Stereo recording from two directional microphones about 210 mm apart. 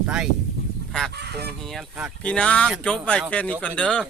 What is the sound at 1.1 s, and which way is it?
Speech, 50° right (ahead or behind).